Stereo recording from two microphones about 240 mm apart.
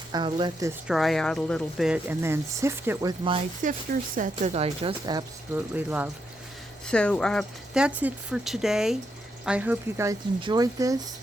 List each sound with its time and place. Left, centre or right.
0.1 s a woman's voice: centre
0.9 s speech: centre; by 5.2 s right
5.5 s speech: centre
6.8 s speech: centre